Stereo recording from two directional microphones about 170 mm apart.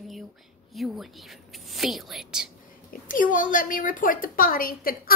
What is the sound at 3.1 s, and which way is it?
A woman's voice, 50° left (ahead or behind).